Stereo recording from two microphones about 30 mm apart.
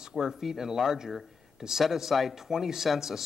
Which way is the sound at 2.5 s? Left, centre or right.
Centre.